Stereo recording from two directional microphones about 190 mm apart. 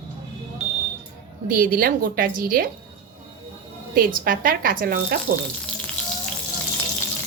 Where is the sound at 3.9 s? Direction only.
50° right (ahead or behind).